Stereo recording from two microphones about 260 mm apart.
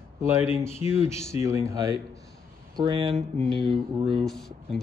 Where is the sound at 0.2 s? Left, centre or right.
Centre.